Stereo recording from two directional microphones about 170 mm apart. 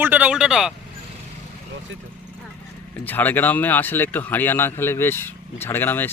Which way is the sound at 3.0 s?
10° left (ahead or behind).